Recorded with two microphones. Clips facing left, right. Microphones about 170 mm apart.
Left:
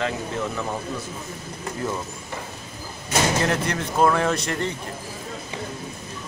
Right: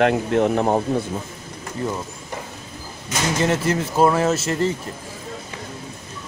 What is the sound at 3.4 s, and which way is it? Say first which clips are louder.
Speech: right 4 dB; centre (ahead or behind).